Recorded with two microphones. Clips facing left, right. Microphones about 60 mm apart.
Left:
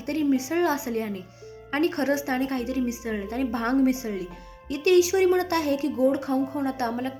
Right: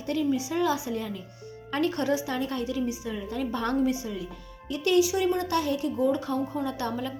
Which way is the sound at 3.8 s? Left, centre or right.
Left.